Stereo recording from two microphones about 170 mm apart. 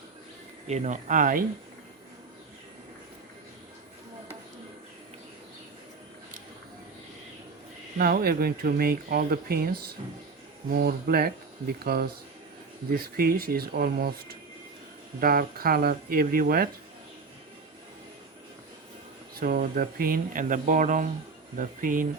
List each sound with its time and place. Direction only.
0.7 s speech: 45° right (ahead or behind)
7.9 s speech: 65° right (ahead or behind)
19.4 s speech: 60° right (ahead or behind)